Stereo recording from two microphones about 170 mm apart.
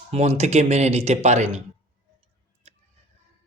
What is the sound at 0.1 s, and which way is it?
A man's voice, 40° right (ahead or behind).